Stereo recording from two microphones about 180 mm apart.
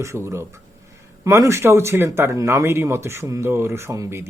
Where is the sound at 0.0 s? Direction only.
15° right (ahead or behind).